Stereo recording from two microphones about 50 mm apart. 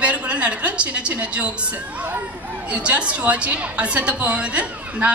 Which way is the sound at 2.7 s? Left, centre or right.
Right.